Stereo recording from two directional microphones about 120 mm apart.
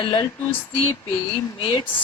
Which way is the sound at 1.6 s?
45° left (ahead or behind).